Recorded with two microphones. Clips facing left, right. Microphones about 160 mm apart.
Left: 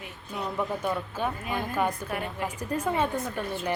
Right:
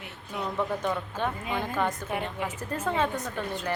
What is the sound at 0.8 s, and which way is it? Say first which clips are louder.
A woman's voice: even; 5° left (ahead or behind).